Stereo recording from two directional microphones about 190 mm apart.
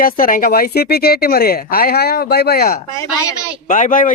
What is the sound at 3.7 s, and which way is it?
Speech, 45° left (ahead or behind).